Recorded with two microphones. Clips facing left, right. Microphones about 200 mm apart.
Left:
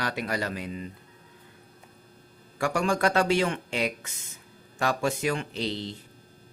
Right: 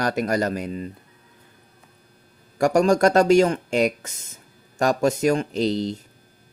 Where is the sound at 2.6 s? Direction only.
40° right (ahead or behind).